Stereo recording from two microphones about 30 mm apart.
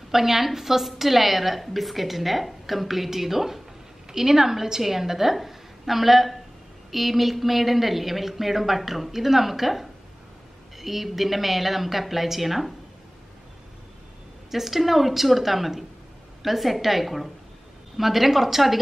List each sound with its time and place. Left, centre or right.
0.1 s a woman's voice: centre
14.5 s a woman's voice: centre